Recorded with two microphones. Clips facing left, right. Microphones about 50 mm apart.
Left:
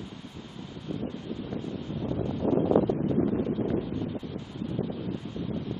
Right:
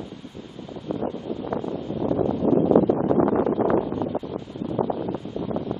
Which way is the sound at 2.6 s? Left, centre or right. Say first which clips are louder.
Right 6 dB; right.